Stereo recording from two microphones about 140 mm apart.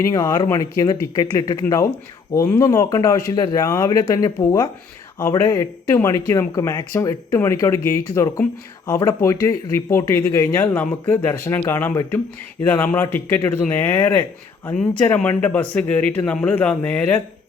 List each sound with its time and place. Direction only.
0.0 s speech: 25° left (ahead or behind)